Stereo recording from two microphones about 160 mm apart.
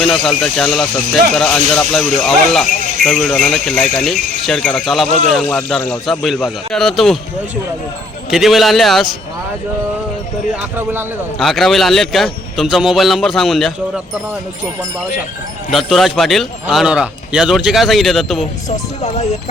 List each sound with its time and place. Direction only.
0.0 s a man's voice: centre (ahead or behind)
8.3 s a man's voice: centre (ahead or behind)
10.6 s speech: 10° right (ahead or behind)
11.4 s a man's voice: centre (ahead or behind)
15.7 s a man's voice: centre (ahead or behind)
19.0 s speech: 45° left (ahead or behind)